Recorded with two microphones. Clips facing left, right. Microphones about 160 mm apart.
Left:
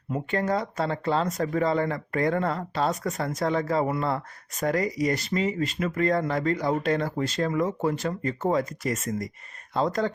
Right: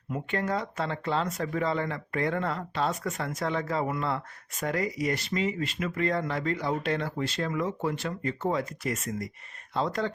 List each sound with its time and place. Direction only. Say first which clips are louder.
0.1 s speech: left 4 dB; 40° left (ahead or behind)